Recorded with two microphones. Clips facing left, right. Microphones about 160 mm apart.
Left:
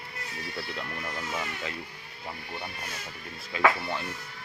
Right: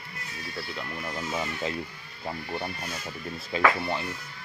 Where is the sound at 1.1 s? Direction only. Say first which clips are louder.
Right 5 dB; 20° right (ahead or behind).